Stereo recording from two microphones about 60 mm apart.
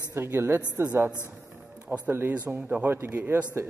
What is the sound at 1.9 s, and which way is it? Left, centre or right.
A man's voice, right.